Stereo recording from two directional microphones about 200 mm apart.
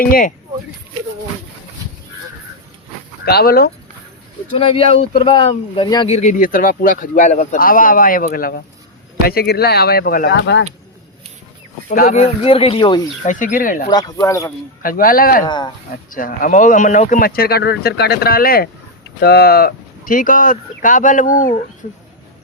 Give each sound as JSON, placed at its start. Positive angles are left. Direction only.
{"t": 0.0, "sound": "speech", "side_deg": 45}
{"t": 3.2, "sound": "speech", "side_deg": 50}
{"t": 4.5, "sound": "speech", "side_deg": 30}
{"t": 6.1, "sound": "speech", "side_deg": 40}
{"t": 10.3, "sound": "speech", "side_deg": 60}
{"t": 11.9, "sound": "speech", "side_deg": 45}
{"t": 12.1, "sound": "speech", "side_deg": 30}
{"t": 13.2, "sound": "speech", "side_deg": 40}
{"t": 13.9, "sound": "speech", "side_deg": 20}
{"t": 14.8, "sound": "speech", "side_deg": 45}
{"t": 15.4, "sound": "speech", "side_deg": 20}
{"t": 16.0, "sound": "speech", "side_deg": 45}